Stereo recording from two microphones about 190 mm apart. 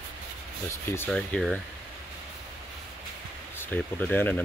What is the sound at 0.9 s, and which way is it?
Speech, 10° left (ahead or behind).